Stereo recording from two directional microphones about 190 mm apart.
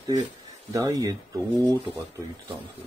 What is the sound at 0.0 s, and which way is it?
Speech, 20° right (ahead or behind).